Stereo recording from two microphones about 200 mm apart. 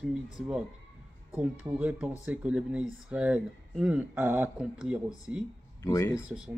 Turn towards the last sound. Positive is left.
turn(degrees=-5)  # may be behind; listen again after turning